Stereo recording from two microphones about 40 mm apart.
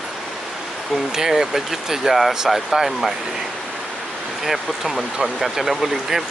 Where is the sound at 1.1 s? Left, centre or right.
Centre.